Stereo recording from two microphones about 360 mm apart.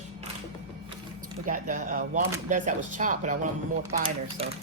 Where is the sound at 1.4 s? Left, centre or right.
Right.